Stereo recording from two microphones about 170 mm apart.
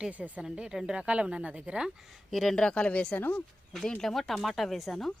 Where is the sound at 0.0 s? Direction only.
10° right (ahead or behind).